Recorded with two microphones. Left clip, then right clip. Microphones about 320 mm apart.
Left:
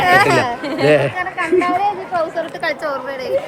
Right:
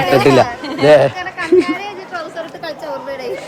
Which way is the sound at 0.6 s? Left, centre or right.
Centre.